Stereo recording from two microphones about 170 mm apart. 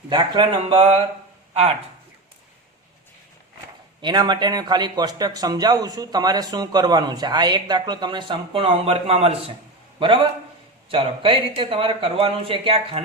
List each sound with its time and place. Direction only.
0.1 s a man's voice: 30° right (ahead or behind)
4.0 s a man's voice: 25° right (ahead or behind)